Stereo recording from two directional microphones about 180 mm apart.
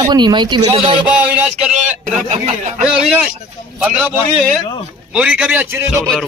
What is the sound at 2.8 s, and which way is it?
Speech, 5° right (ahead or behind).